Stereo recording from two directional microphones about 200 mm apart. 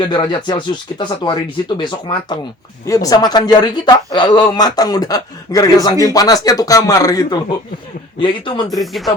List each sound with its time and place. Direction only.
0.0 s a man's voice: 20° left (ahead or behind)
8.8 s speech: centre (ahead or behind)